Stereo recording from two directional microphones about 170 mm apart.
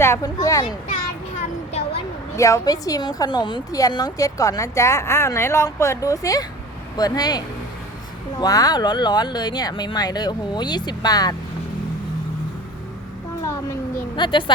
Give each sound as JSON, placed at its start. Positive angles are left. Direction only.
{"t": 0.0, "sound": "speech", "side_deg": 20}
{"t": 2.3, "sound": "a woman's voice", "side_deg": 15}
{"t": 13.4, "sound": "a sound", "side_deg": 20}
{"t": 14.2, "sound": "a woman's voice", "side_deg": 30}